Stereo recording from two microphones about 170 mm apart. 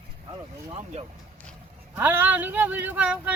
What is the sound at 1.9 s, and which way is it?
Speech, 10° right (ahead or behind).